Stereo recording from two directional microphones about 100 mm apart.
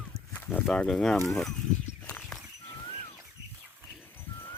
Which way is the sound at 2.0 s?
15° left (ahead or behind).